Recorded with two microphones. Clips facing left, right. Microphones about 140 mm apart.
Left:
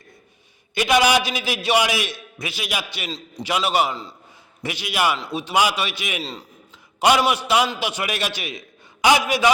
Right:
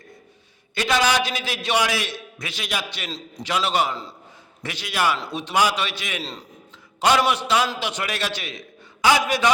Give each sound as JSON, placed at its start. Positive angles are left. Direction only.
{"t": 0.7, "sound": "a man's voice", "side_deg": 15}